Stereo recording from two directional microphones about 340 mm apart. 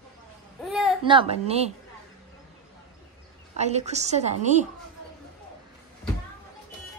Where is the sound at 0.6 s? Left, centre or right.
Centre.